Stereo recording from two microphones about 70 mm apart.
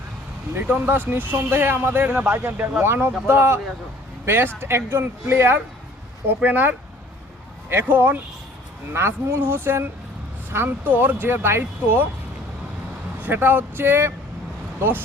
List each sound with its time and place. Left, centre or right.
0.5 s speech: right
2.8 s speech: right
4.6 s speech: right
13.2 s speech: right